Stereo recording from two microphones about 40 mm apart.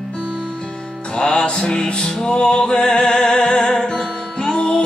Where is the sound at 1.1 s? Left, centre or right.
Left.